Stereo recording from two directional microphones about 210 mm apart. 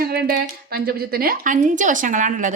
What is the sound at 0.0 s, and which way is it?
A woman's voice, 45° right (ahead or behind).